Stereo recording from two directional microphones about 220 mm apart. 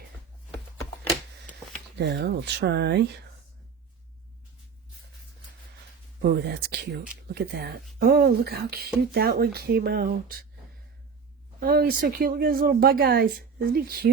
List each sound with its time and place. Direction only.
2.0 s speech: 50° right (ahead or behind)
6.5 s speech: 45° right (ahead or behind)
11.6 s speech: 45° right (ahead or behind)